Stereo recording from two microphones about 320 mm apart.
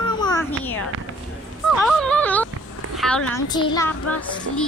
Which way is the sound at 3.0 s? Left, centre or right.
Centre.